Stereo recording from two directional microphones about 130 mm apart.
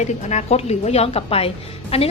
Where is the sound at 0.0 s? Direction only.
60° left (ahead or behind).